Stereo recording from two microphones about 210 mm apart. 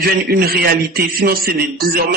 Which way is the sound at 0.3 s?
50° right (ahead or behind).